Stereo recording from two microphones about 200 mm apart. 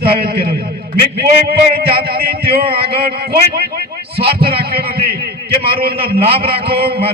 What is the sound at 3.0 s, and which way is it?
Speech, 50° right (ahead or behind).